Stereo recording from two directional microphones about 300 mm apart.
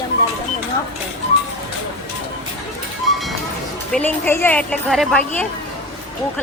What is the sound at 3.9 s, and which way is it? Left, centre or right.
A woman's voice, centre.